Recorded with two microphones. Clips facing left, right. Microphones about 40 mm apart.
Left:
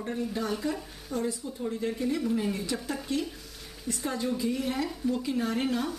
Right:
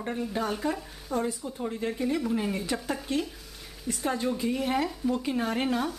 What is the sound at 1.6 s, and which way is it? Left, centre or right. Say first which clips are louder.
Speech: even; right.